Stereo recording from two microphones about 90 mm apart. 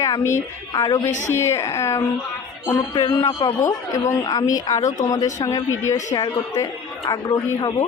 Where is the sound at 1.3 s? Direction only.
30° left (ahead or behind).